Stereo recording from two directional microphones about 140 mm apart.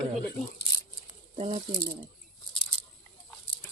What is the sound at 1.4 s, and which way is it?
Speech, 45° right (ahead or behind).